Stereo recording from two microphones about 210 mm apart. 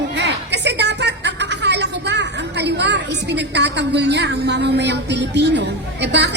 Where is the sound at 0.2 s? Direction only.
55° right (ahead or behind).